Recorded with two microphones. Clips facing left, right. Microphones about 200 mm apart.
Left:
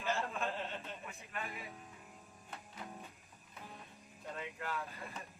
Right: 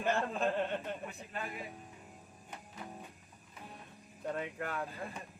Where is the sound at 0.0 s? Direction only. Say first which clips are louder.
Right 5 dB; 55° right (ahead or behind).